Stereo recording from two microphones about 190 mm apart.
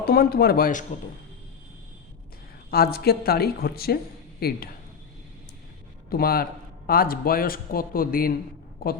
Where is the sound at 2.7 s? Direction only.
55° left (ahead or behind).